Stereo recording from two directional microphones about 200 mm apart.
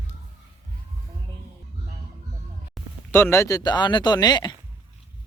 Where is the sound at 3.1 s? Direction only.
10° left (ahead or behind).